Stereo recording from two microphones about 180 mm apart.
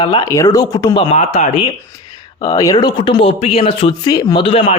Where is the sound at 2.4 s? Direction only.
20° left (ahead or behind).